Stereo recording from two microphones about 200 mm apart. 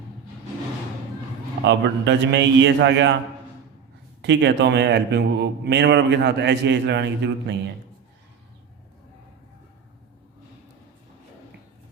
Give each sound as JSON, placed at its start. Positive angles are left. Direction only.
{"t": 1.6, "sound": "a man's voice", "side_deg": -60}
{"t": 4.2, "sound": "a man's voice", "side_deg": -60}